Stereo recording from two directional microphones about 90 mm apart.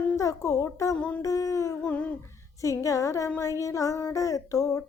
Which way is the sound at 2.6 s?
35° left (ahead or behind).